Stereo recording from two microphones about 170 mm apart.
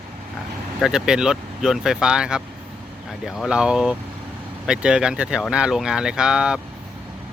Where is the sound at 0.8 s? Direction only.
5° right (ahead or behind).